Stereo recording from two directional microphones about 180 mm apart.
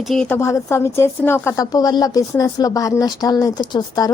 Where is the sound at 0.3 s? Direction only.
15° left (ahead or behind).